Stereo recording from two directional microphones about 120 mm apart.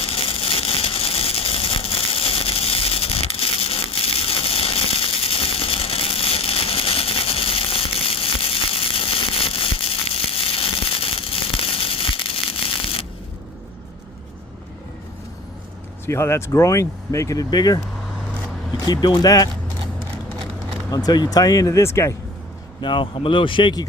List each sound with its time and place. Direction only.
0.0 s a sound: 50° left (ahead or behind)
16.0 s speech: 20° left (ahead or behind)
18.9 s speech: 35° left (ahead or behind)
20.9 s speech: 35° left (ahead or behind)
22.8 s speech: 45° left (ahead or behind)